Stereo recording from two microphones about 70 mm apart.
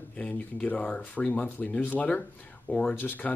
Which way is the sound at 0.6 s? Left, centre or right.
Centre.